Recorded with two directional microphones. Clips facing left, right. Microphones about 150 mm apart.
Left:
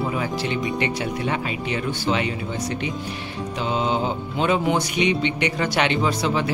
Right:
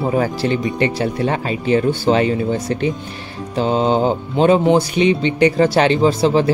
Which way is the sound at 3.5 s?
35° right (ahead or behind).